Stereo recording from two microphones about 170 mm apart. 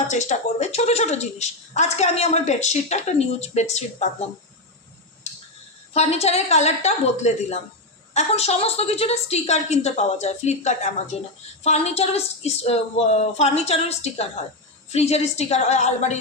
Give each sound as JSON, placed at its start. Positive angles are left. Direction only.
{"t": 0.1, "sound": "a woman's voice", "side_deg": 45}
{"t": 5.9, "sound": "a woman's voice", "side_deg": 40}